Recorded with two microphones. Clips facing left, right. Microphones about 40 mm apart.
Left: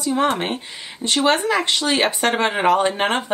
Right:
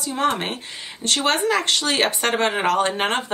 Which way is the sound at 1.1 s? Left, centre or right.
Centre.